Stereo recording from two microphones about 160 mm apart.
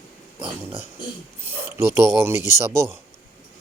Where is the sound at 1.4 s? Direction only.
15° right (ahead or behind).